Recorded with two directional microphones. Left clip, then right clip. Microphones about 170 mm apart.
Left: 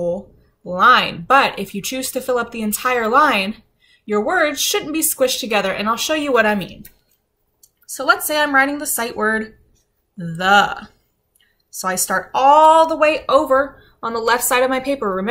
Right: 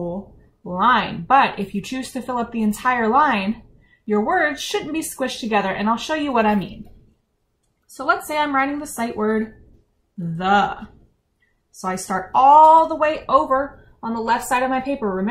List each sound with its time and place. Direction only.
0.7 s speech: 15° left (ahead or behind)
7.8 s speech: 10° left (ahead or behind)
11.8 s speech: 10° left (ahead or behind)